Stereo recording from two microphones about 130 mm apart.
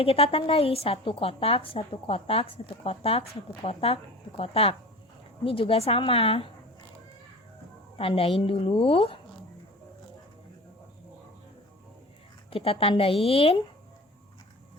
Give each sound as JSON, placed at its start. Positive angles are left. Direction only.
{"t": 0.0, "sound": "speech", "side_deg": 45}
{"t": 7.9, "sound": "speech", "side_deg": 45}
{"t": 12.5, "sound": "speech", "side_deg": 45}